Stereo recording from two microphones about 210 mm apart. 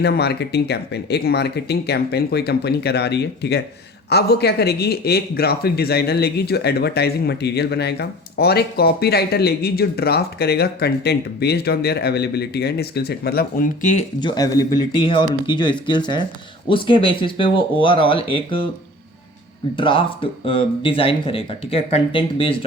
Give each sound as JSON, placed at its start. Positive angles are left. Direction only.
{"t": 0.0, "sound": "speech", "side_deg": 50}
{"t": 14.2, "sound": "speech", "side_deg": 20}
{"t": 19.7, "sound": "speech", "side_deg": 25}